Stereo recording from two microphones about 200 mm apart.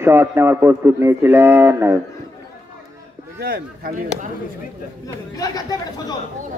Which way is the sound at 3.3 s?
50° right (ahead or behind).